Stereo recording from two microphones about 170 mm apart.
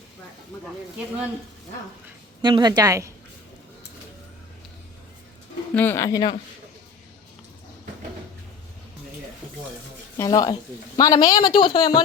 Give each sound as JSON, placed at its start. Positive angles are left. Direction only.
{"t": 2.4, "sound": "a woman's voice", "side_deg": -25}
{"t": 5.7, "sound": "speech", "side_deg": 10}
{"t": 10.2, "sound": "speech", "side_deg": 20}